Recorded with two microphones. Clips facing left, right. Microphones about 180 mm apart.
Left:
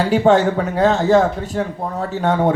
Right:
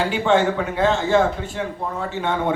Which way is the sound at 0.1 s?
40° left (ahead or behind).